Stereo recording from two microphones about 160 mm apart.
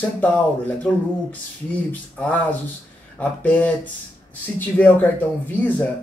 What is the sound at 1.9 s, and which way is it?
Speech, 10° left (ahead or behind).